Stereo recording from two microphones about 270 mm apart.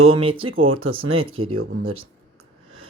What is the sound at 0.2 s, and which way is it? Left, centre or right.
Speech, centre.